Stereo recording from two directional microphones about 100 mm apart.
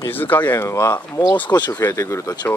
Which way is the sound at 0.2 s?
20° left (ahead or behind).